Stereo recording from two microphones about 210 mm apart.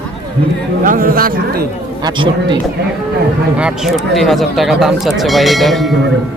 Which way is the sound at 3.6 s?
5° right (ahead or behind).